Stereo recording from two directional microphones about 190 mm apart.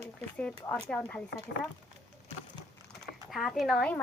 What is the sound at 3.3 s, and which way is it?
Speech, centre (ahead or behind).